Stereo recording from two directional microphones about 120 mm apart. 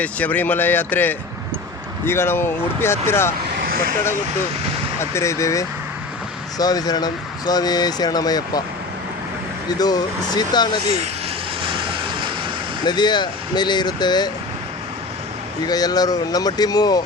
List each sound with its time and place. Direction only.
0.0 s speech: 10° left (ahead or behind)
4.9 s speech: 25° left (ahead or behind)
9.6 s speech: 35° left (ahead or behind)
12.8 s speech: 35° left (ahead or behind)
15.6 s speech: 35° left (ahead or behind)